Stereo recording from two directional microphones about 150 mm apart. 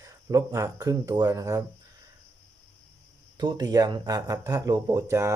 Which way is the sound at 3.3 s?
30° right (ahead or behind).